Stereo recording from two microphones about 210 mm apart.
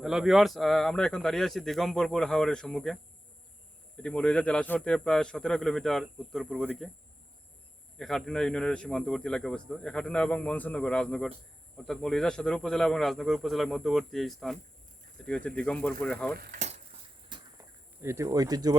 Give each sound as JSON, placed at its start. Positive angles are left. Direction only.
{"t": 0.0, "sound": "a man's voice", "side_deg": 0}
{"t": 4.0, "sound": "a man's voice", "side_deg": 5}
{"t": 7.9, "sound": "a man's voice", "side_deg": 0}
{"t": 16.3, "sound": "speech", "side_deg": -45}
{"t": 16.6, "sound": "a sound", "side_deg": -30}
{"t": 17.2, "sound": "a sound", "side_deg": -20}